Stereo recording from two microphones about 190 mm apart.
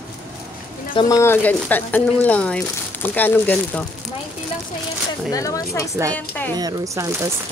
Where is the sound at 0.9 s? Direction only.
20° left (ahead or behind).